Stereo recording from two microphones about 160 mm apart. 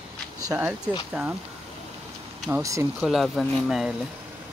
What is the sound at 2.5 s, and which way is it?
Speech, 20° right (ahead or behind).